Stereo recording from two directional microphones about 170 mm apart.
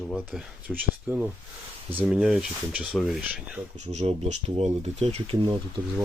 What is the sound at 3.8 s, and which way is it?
Speech, 40° right (ahead or behind).